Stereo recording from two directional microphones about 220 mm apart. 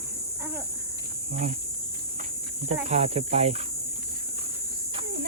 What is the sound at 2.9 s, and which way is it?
Speech, 30° right (ahead or behind).